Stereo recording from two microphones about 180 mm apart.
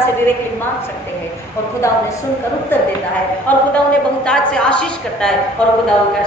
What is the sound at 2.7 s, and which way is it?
A woman's voice, 10° left (ahead or behind).